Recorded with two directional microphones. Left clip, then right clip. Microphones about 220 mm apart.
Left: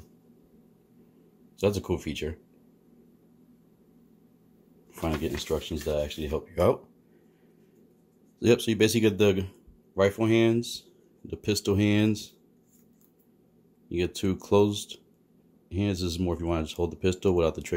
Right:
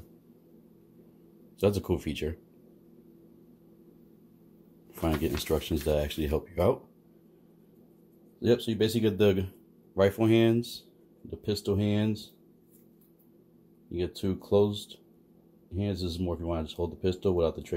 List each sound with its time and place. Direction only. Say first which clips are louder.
1.6 s speech: even; centre (ahead or behind)
5.4 s speech: right 1 dB; 15° right (ahead or behind)
6.5 s speech: left 3 dB; 10° left (ahead or behind)
8.4 s speech: left 4 dB; 25° left (ahead or behind)
9.1 s speech: left 1 dB; 5° left (ahead or behind)
11.2 s speech: left 3 dB; 20° left (ahead or behind)
13.8 s speech: left 4 dB; 20° left (ahead or behind)